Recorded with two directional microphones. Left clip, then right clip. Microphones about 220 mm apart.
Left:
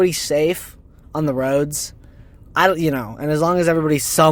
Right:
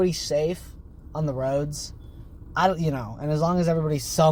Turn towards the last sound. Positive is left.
turn(degrees=45)  # may be behind; listen again after turning